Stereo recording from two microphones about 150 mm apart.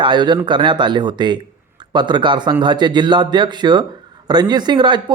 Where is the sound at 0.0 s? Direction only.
30° right (ahead or behind).